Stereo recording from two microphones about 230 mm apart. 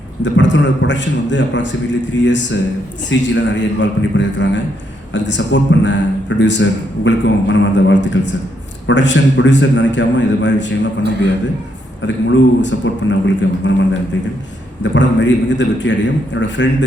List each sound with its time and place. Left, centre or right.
0.2 s a man's voice: left
12.0 s a man's voice: left
14.9 s a man's voice: left